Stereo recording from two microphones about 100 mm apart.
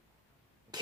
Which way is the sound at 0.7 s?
45° right (ahead or behind).